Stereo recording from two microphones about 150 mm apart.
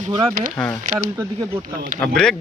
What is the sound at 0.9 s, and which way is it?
Speech, 60° right (ahead or behind).